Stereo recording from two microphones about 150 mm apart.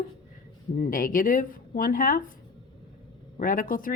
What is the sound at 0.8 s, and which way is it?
Speech, 65° left (ahead or behind).